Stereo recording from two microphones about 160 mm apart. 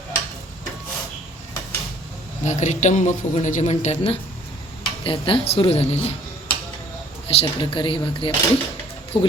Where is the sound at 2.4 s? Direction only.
45° left (ahead or behind).